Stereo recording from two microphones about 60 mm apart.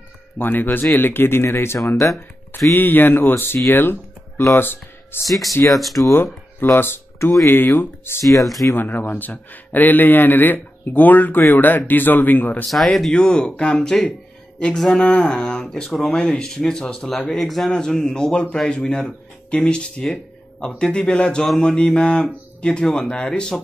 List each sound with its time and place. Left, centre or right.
0.4 s a man's voice: left
5.7 s speech: centre
6.6 s a man's voice: left
8.3 s speech: centre
8.7 s a man's voice: left
12.6 s speech: centre